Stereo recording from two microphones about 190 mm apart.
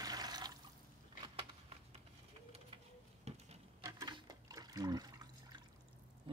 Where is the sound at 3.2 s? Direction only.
35° right (ahead or behind).